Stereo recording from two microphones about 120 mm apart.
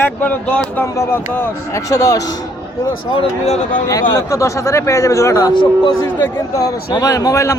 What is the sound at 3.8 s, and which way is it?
Speech, 30° left (ahead or behind).